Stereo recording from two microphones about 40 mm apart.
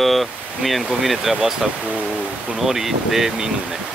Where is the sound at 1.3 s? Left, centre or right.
Centre.